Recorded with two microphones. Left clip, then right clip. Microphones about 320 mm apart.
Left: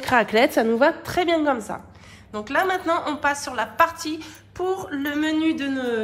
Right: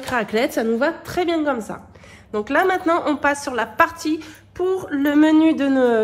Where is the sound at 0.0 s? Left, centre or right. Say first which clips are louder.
Left 3 dB; left.